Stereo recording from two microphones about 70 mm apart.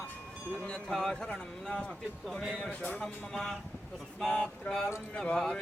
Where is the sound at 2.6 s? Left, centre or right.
Centre.